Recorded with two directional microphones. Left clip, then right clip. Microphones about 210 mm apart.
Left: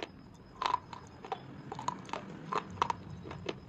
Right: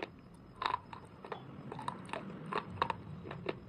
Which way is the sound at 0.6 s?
10° left (ahead or behind).